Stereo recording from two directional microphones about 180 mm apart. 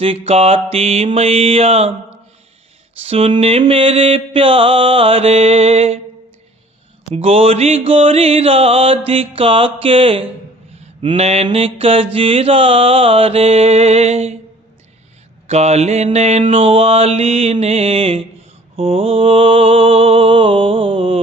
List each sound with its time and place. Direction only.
0.0 s mantra: 35° right (ahead or behind)
3.0 s mantra: 35° right (ahead or behind)
7.1 s mantra: 35° right (ahead or behind)
9.0 s music: 30° right (ahead or behind)
11.0 s mantra: 30° right (ahead or behind)
15.4 s mantra: 35° right (ahead or behind)